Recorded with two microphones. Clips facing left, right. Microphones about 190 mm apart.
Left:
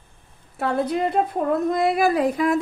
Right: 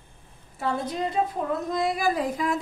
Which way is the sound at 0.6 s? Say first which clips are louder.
Left 6 dB; 65° left (ahead or behind).